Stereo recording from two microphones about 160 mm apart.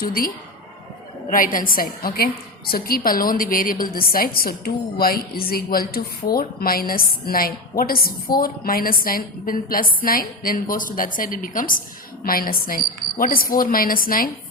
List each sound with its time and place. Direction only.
0.0 s a woman's voice: 65° left (ahead or behind)
1.3 s a woman's voice: 60° left (ahead or behind)